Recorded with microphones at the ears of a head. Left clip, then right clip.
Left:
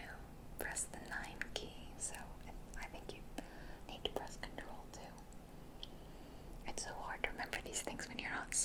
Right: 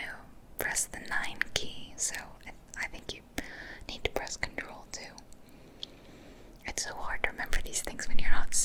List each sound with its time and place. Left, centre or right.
0.6 s whispering: right
6.7 s speech: right